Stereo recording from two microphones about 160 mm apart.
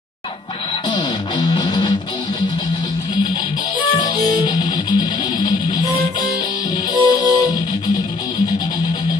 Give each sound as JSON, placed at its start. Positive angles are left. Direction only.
{"t": 0.8, "sound": "music", "side_deg": 30}
{"t": 4.1, "sound": "music", "side_deg": 25}
{"t": 7.0, "sound": "music", "side_deg": 20}